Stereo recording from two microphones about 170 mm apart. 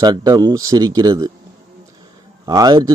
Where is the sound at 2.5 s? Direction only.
25° right (ahead or behind).